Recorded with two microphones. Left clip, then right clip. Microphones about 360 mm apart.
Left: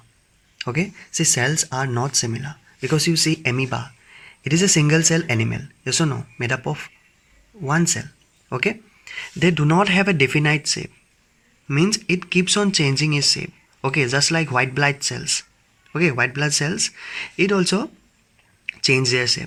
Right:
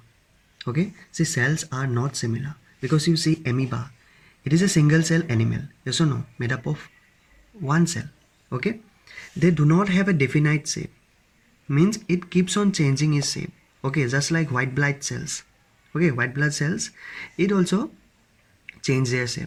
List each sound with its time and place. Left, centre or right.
0.6 s speech: centre